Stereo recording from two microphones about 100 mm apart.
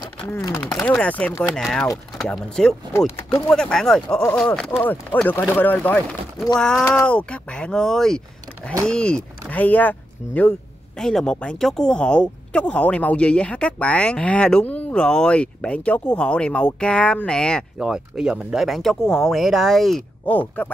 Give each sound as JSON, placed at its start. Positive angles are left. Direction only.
{"t": 0.7, "sound": "speech", "side_deg": 5}
{"t": 11.0, "sound": "speech", "side_deg": 5}
{"t": 17.7, "sound": "speech", "side_deg": -5}
{"t": 20.2, "sound": "speech", "side_deg": 15}